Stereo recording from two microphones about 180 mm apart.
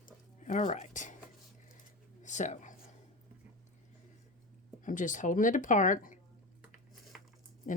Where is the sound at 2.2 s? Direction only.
45° left (ahead or behind).